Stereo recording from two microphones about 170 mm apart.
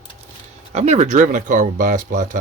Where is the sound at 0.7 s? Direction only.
40° right (ahead or behind).